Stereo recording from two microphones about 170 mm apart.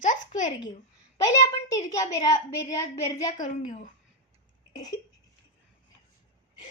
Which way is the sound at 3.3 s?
50° left (ahead or behind).